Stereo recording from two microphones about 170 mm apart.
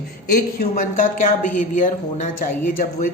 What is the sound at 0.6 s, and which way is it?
Speech, 50° left (ahead or behind).